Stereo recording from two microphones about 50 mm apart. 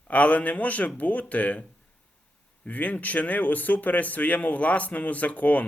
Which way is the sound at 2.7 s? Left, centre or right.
Left.